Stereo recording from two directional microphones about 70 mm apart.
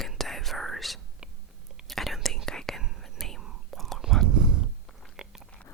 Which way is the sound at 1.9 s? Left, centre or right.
Centre.